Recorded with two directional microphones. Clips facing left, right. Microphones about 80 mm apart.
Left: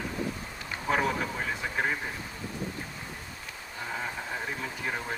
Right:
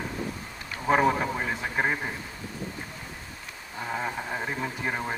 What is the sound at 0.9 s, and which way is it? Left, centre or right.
Speech, right.